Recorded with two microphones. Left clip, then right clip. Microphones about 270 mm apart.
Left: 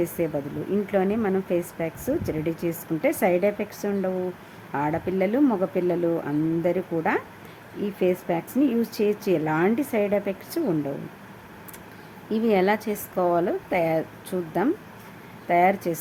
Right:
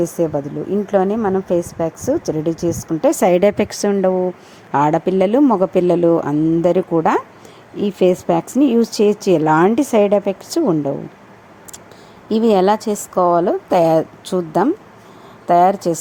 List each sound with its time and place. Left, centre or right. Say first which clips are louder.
0.9 s a woman's voice: right 9 dB; centre
12.3 s speech: right 8 dB; right